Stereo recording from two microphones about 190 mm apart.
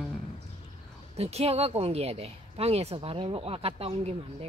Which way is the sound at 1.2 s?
35° right (ahead or behind).